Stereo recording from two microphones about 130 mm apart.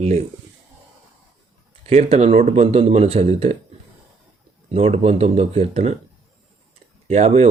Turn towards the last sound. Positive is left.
turn(degrees=-55)  # may be behind; listen again after turning